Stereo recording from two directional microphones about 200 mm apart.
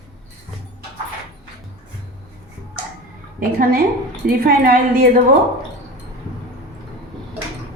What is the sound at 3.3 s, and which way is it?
A woman's voice, 45° right (ahead or behind).